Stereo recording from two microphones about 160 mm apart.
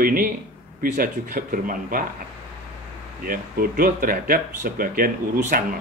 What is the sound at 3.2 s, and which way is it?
Speech, 60° right (ahead or behind).